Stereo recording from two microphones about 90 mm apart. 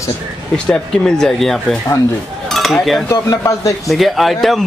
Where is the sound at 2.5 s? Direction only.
Centre (ahead or behind).